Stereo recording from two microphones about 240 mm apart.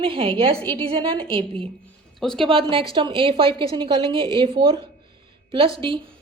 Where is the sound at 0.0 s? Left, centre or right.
Right.